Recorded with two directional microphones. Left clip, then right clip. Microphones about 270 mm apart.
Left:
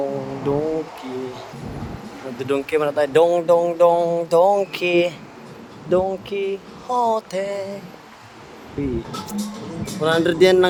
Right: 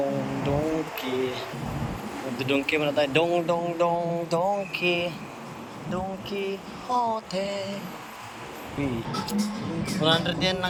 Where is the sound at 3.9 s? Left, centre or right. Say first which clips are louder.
Left 9 dB; left.